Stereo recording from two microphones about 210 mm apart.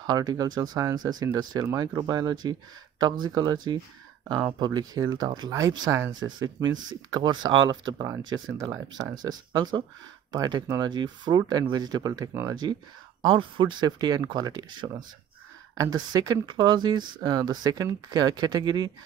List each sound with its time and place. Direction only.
0.0 s speech: 20° right (ahead or behind)